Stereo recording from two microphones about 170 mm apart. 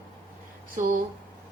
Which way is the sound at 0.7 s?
55° right (ahead or behind).